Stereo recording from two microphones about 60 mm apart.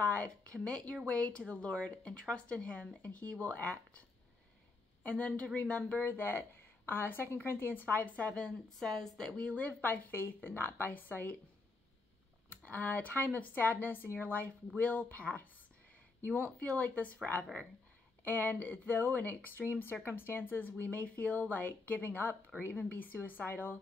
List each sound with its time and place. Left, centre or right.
0.0 s a woman's voice: left
5.0 s a woman's voice: left
6.0 s a woman's voice: left
8.7 s speech: centre
9.4 s a woman's voice: left
12.4 s a woman's voice: left